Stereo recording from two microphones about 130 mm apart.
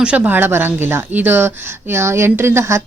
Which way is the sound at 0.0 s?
10° right (ahead or behind).